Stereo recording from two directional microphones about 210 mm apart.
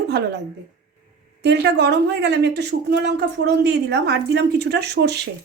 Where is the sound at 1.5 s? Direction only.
55° right (ahead or behind).